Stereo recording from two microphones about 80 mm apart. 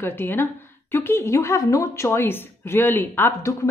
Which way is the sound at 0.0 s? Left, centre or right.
Left.